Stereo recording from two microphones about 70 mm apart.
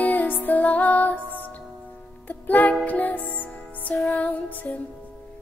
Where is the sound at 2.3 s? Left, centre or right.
Left.